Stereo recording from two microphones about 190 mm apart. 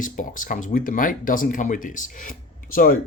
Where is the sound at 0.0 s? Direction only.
45° left (ahead or behind).